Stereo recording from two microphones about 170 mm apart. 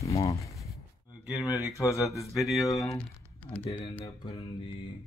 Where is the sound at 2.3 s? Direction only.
Centre (ahead or behind).